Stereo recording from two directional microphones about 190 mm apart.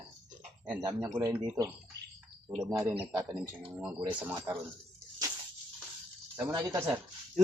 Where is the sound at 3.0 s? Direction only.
10° right (ahead or behind).